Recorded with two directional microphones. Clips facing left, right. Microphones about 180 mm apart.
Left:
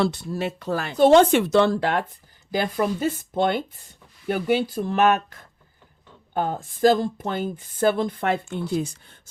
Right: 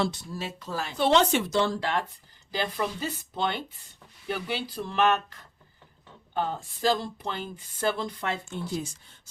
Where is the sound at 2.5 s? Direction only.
50° left (ahead or behind).